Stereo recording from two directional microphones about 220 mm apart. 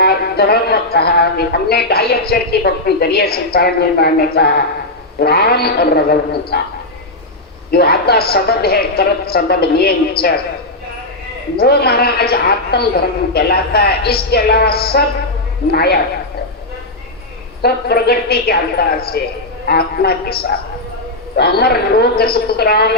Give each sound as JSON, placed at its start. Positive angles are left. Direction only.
{"t": 0.0, "sound": "a woman's voice", "side_deg": 45}
{"t": 7.7, "sound": "a woman's voice", "side_deg": 45}
{"t": 11.5, "sound": "a woman's voice", "side_deg": 45}
{"t": 17.6, "sound": "a woman's voice", "side_deg": 45}